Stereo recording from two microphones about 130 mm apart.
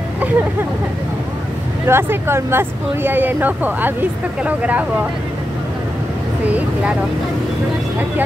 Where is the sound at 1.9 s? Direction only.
20° right (ahead or behind).